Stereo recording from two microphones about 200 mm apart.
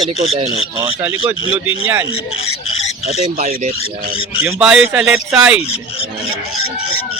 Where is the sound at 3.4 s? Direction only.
35° right (ahead or behind).